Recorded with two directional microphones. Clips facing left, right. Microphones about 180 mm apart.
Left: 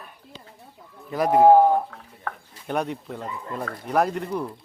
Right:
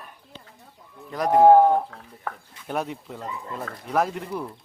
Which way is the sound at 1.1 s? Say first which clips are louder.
Even; 5° left (ahead or behind).